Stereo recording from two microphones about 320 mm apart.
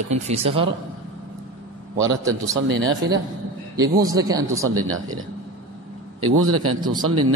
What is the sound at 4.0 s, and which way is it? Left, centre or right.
Speech, centre.